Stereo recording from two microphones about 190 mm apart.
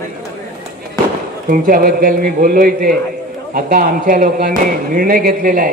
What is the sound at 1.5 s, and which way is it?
Speech, 50° right (ahead or behind).